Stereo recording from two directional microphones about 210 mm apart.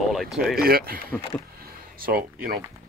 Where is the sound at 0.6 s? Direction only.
45° right (ahead or behind).